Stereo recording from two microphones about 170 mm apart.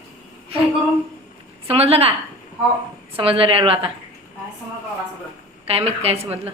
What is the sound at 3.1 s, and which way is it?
Speech, 30° right (ahead or behind).